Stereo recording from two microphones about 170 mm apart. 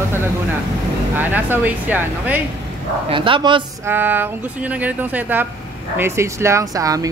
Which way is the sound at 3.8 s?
10° right (ahead or behind).